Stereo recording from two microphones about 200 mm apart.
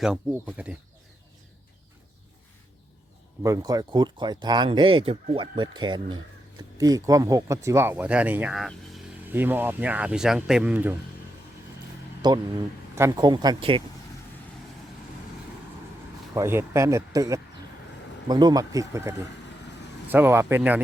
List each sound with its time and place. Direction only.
0.0 s speech: 5° right (ahead or behind)
3.4 s speech: 15° right (ahead or behind)
12.2 s speech: 20° right (ahead or behind)
16.3 s speech: 15° right (ahead or behind)